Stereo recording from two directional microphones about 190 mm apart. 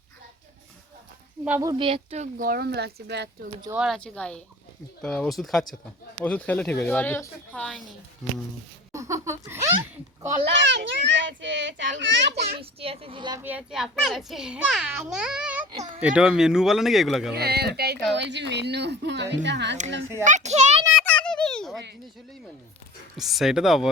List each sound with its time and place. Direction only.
1.5 s a sound: 10° right (ahead or behind)
1.7 s speech: 30° right (ahead or behind)
2.5 s a woman's voice: 55° right (ahead or behind)
3.8 s a child's voice: centre (ahead or behind)
8.9 s a sound: 15° right (ahead or behind)
10.5 s a child's voice: 70° right (ahead or behind)
12.5 s speech: 30° right (ahead or behind)
13.4 s a child's voice: 5° right (ahead or behind)
17.3 s a woman's voice: 55° right (ahead or behind)
20.2 s speech: 40° right (ahead or behind)
20.9 s a sound: 5° left (ahead or behind)
23.1 s a child's voice: centre (ahead or behind)